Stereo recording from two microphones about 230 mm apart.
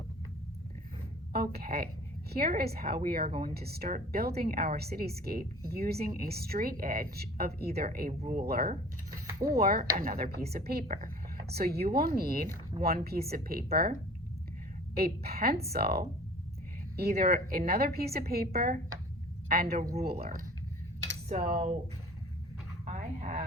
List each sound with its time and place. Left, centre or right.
1.3 s speech: right
8.2 s speech: right
8.4 s speech: right
9.1 s mechanisms: centre
9.5 s speech: right
14.9 s a woman's voice: right
21.5 s speech: right
22.9 s a sound: right